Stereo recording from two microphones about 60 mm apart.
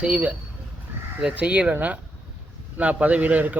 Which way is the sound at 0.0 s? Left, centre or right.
Right.